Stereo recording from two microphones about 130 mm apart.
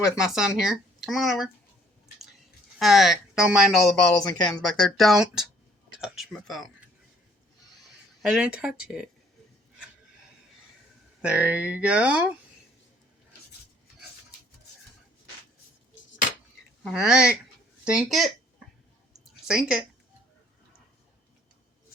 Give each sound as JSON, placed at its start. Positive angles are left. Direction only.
{"t": 0.0, "sound": "speech", "side_deg": -5}
{"t": 2.7, "sound": "speech", "side_deg": 0}
{"t": 4.1, "sound": "speech", "side_deg": 25}
{"t": 4.8, "sound": "speech", "side_deg": 0}
{"t": 8.2, "sound": "speech", "side_deg": -5}
{"t": 11.2, "sound": "speech", "side_deg": -10}
{"t": 16.9, "sound": "speech", "side_deg": -5}
{"t": 19.2, "sound": "a sound", "side_deg": -5}